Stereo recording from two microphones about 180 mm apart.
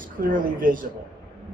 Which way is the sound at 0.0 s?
50° right (ahead or behind).